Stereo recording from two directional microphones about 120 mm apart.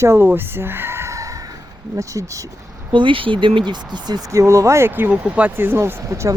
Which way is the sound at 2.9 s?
45° right (ahead or behind).